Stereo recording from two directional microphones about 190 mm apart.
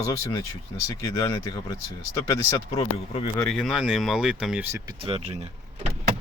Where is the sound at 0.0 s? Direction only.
25° left (ahead or behind).